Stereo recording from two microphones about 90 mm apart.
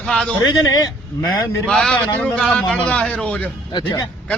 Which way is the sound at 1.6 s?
5° left (ahead or behind).